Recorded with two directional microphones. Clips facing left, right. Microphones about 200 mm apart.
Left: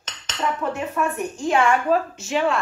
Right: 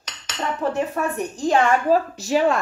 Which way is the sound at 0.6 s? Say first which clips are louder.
Right 2 dB; 35° right (ahead or behind).